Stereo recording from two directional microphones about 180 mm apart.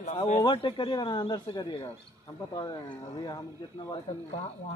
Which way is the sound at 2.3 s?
20° left (ahead or behind).